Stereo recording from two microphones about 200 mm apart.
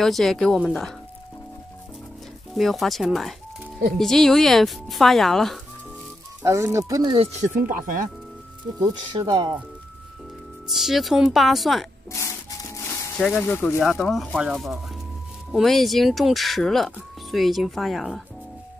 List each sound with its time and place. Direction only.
0.0 s speech: centre (ahead or behind)
2.5 s speech: centre (ahead or behind)
6.4 s speech: 15° right (ahead or behind)
7.1 s speech: 35° right (ahead or behind)
8.7 s speech: 20° right (ahead or behind)
10.7 s speech: centre (ahead or behind)
12.1 s a sound: 15° left (ahead or behind)
13.2 s speech: 5° left (ahead or behind)